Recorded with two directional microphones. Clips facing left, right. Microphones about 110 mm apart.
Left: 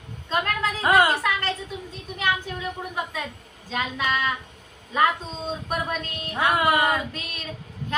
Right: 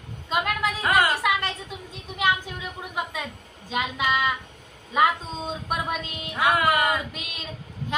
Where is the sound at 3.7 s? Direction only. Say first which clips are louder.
Right 1 dB; 15° right (ahead or behind).